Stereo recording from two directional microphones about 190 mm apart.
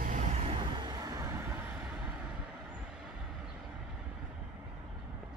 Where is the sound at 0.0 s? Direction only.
40° right (ahead or behind).